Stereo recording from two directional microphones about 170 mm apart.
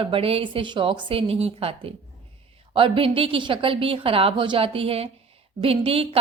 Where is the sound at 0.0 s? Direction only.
30° right (ahead or behind).